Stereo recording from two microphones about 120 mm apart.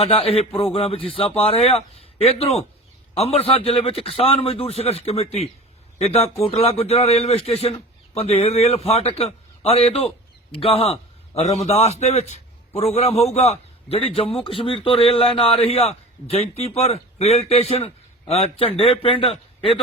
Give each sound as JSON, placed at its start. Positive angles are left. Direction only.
{"t": 0.0, "sound": "a man's voice", "side_deg": 55}